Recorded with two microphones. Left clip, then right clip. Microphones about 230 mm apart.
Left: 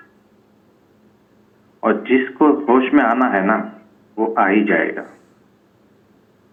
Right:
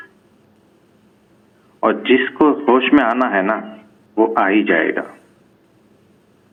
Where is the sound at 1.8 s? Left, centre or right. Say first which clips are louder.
Right 2 dB; right.